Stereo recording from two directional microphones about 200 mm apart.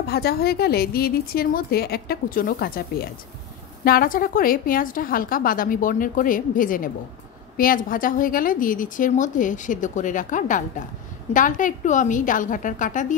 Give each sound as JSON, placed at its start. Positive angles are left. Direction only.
{"t": 0.0, "sound": "a woman's voice", "side_deg": 50}